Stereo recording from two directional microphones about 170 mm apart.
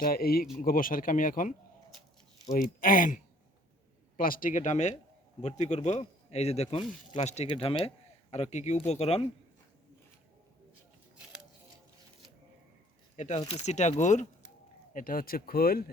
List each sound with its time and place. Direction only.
0.0 s speech: 60° left (ahead or behind)
4.2 s speech: 55° left (ahead or behind); by 9.2 s 40° left (ahead or behind)
13.1 s speech: 40° left (ahead or behind); by 15.8 s 60° left (ahead or behind)